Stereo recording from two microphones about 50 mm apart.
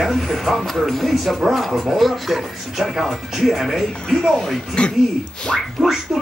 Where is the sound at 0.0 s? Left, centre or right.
Centre.